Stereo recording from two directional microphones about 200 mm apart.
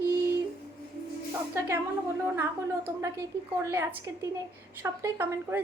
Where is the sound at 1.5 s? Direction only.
10° right (ahead or behind).